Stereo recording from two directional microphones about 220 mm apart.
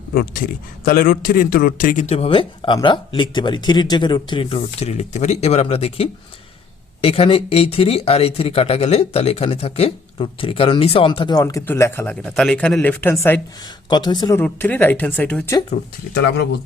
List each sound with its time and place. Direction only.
0.1 s speech: 40° left (ahead or behind); by 15.5 s 5° left (ahead or behind)
16.1 s speech: 50° left (ahead or behind)